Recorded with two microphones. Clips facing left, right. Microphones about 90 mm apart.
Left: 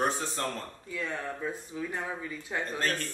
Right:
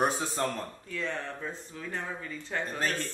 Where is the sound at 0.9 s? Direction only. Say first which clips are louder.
Even; 10° left (ahead or behind).